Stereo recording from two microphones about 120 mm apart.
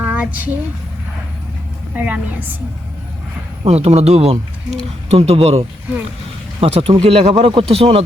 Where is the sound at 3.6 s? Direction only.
60° right (ahead or behind).